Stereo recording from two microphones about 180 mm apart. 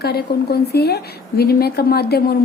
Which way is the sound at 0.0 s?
60° left (ahead or behind).